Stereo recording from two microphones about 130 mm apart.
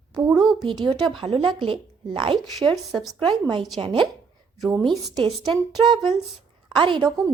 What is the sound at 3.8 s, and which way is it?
Speech, 40° right (ahead or behind).